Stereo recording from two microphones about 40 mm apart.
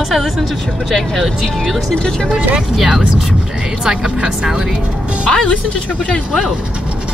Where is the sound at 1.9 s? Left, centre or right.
Centre.